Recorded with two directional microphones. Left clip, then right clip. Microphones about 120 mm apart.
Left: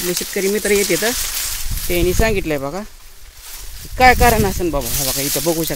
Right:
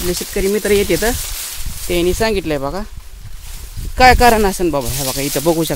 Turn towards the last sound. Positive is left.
turn(degrees=-40)  # may be behind; listen again after turning